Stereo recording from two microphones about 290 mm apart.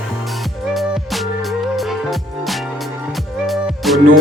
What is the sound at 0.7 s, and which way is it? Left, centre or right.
Music, centre.